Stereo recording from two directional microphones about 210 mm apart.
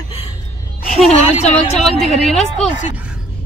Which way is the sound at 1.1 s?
30° left (ahead or behind).